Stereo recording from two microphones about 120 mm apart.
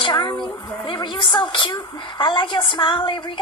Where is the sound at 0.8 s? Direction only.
40° left (ahead or behind).